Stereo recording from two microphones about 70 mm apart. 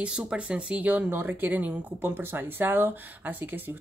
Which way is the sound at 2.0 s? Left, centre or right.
Right.